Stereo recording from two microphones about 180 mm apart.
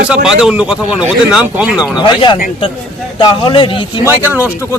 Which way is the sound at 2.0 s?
25° left (ahead or behind).